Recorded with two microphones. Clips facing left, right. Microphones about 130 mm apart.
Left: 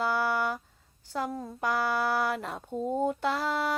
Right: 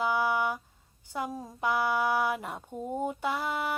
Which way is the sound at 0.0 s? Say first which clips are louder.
Even; 10° right (ahead or behind).